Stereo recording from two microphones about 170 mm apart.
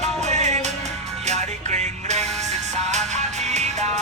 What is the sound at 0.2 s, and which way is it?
Music, 45° right (ahead or behind).